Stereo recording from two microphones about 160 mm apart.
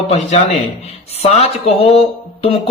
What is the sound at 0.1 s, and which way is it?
Speech, 40° left (ahead or behind).